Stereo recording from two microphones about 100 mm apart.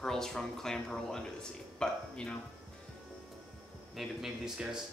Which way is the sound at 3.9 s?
5° right (ahead or behind).